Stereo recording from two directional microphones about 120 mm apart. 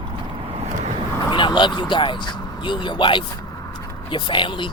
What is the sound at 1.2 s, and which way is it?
Speech, 40° left (ahead or behind).